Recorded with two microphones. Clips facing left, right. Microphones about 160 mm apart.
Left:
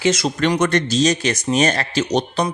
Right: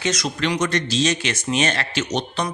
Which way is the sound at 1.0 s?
40° left (ahead or behind).